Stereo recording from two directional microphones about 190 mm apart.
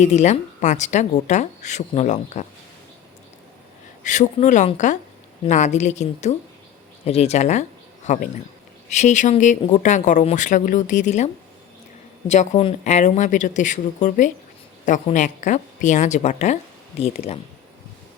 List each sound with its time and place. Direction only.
0.0 s speech: 35° left (ahead or behind)
4.0 s speech: 40° left (ahead or behind)
12.3 s speech: 35° left (ahead or behind)